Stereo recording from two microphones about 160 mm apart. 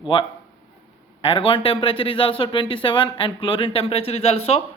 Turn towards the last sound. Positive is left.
turn(degrees=40)  # may be behind; listen again after turning